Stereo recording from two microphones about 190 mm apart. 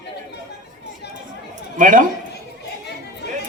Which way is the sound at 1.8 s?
45° right (ahead or behind).